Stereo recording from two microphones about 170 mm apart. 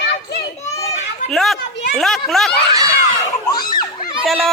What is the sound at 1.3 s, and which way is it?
A child's voice, centre (ahead or behind).